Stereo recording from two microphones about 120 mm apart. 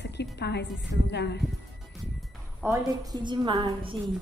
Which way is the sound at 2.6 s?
30° right (ahead or behind).